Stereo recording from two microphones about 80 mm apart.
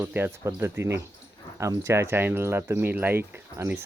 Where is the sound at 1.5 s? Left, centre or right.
Right.